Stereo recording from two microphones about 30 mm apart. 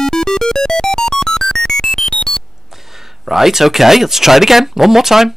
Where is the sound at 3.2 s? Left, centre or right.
Centre.